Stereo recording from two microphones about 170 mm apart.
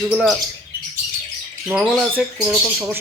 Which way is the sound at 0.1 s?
Centre (ahead or behind).